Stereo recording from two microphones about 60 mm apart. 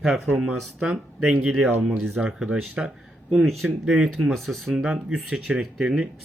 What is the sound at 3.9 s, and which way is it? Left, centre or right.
Speech, centre.